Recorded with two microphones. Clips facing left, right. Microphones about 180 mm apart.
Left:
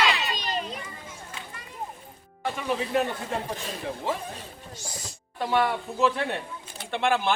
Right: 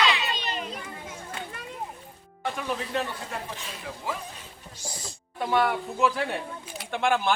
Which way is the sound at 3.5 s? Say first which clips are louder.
Left 5 dB; 40° left (ahead or behind).